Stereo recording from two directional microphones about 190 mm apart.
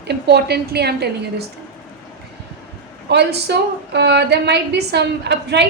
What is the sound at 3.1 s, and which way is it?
A woman's voice, 65° right (ahead or behind).